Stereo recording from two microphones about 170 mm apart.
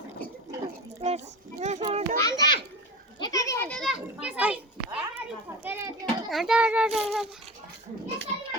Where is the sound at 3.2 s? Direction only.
20° left (ahead or behind); by 5.0 s 10° right (ahead or behind).